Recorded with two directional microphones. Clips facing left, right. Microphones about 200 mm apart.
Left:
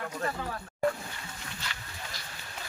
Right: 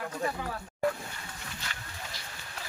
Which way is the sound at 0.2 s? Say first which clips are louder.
Right 1 dB; 10° right (ahead or behind).